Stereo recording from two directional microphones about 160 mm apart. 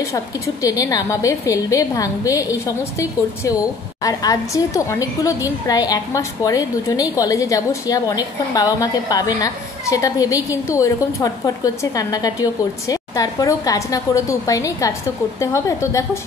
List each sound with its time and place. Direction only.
0.1 s a woman's voice: 20° left (ahead or behind)